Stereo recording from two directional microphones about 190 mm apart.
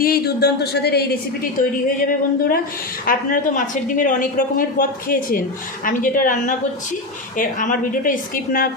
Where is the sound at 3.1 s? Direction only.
50° left (ahead or behind).